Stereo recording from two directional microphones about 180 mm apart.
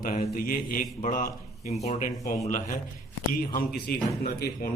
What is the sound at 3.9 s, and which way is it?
Speech, 60° left (ahead or behind).